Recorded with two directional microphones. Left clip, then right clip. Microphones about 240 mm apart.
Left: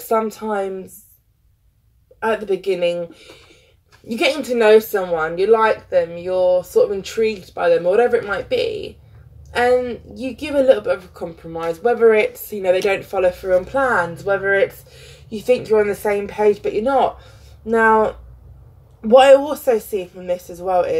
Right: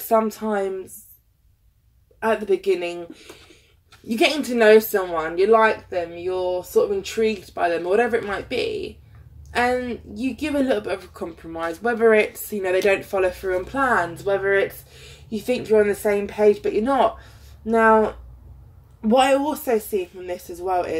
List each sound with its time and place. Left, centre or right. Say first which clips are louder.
0.1 s speech: left 1 dB; centre
2.1 s speech: left 1 dB; centre